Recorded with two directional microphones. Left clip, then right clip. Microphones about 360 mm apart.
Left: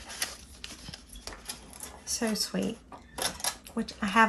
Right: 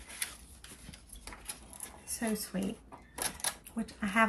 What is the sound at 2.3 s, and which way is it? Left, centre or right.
Speech, centre.